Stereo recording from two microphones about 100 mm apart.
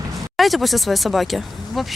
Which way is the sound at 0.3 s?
Centre (ahead or behind).